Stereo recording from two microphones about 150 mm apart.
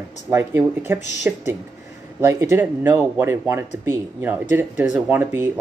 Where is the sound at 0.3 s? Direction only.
15° right (ahead or behind).